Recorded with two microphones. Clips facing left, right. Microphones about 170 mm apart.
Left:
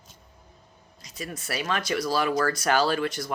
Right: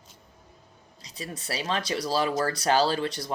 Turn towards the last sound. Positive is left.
turn(degrees=-30)  # may be behind; listen again after turning